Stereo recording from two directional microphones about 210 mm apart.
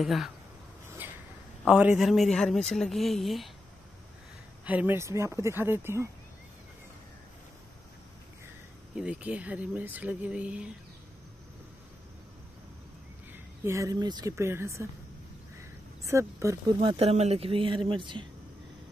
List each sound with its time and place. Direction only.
0.0 s a man's voice: centre (ahead or behind)
1.0 s a sound: 10° right (ahead or behind)
1.6 s a man's voice: 5° right (ahead or behind)
4.6 s speech: 10° right (ahead or behind)
8.9 s speech: 5° right (ahead or behind)
13.3 s speech: 15° right (ahead or behind)